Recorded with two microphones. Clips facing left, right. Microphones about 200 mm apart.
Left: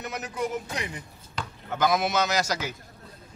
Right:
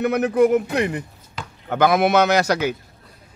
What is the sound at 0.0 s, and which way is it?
Speech, 60° right (ahead or behind).